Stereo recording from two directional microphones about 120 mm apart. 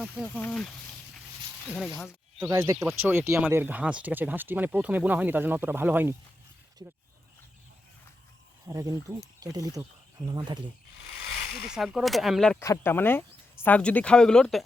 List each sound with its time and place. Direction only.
0.3 s speech: 10° left (ahead or behind)
2.5 s speech: 25° right (ahead or behind)
6.8 s speech: 30° right (ahead or behind)
8.6 s speech: 30° right (ahead or behind)
11.7 s speech: 5° right (ahead or behind)
12.5 s speech: 20° left (ahead or behind); by 14.6 s 5° left (ahead or behind)